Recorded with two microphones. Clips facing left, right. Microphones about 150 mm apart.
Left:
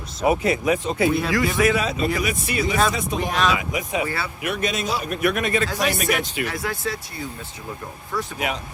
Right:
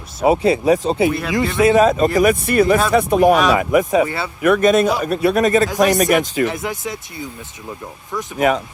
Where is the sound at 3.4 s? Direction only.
50° right (ahead or behind).